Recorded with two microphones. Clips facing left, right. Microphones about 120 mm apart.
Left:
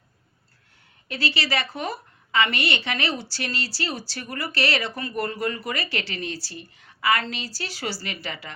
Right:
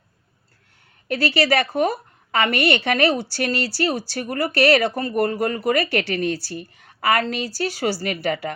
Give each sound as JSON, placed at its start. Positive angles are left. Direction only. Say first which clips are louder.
{"t": 1.0, "sound": "a woman's voice", "louder": "right 8 dB", "side_deg": -50}